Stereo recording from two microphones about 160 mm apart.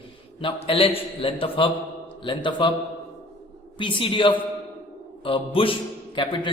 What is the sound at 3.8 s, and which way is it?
A man's voice, 30° left (ahead or behind).